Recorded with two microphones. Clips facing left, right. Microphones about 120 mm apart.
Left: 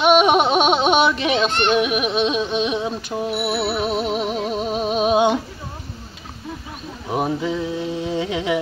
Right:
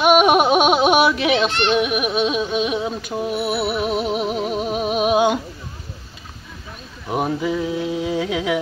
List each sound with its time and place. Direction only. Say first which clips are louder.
0.0 s yodeling: right 1 dB; 5° right (ahead or behind)
1.7 s music: even; centre (ahead or behind)
3.8 s a sound: right 1 dB; 5° right (ahead or behind)
7.1 s music: right 1 dB; centre (ahead or behind)